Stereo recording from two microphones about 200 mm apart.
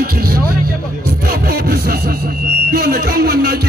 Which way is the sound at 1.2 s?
50° right (ahead or behind).